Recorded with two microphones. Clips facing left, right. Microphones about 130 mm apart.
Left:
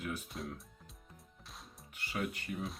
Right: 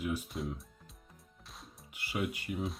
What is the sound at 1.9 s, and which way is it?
Speech, 10° right (ahead or behind).